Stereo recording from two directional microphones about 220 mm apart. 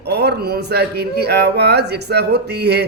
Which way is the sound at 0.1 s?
50° right (ahead or behind).